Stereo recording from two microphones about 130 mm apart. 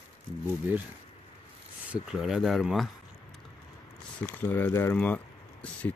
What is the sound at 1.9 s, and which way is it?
Speech, 5° right (ahead or behind).